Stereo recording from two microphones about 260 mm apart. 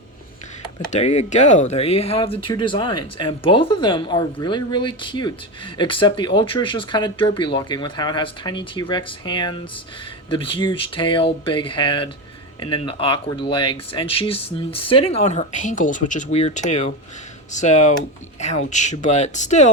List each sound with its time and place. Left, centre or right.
0.9 s speech: left